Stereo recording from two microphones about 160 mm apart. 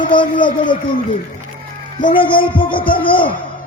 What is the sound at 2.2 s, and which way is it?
Music, 30° left (ahead or behind).